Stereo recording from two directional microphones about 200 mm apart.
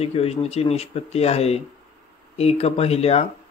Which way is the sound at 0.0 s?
30° left (ahead or behind).